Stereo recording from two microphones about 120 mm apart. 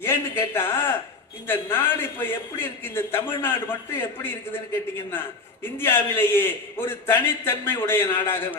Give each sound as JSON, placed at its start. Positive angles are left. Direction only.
{"t": 0.0, "sound": "a man's voice", "side_deg": 20}
{"t": 5.6, "sound": "a man's voice", "side_deg": 20}